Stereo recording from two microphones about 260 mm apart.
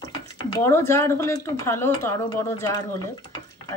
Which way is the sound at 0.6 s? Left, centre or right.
Centre.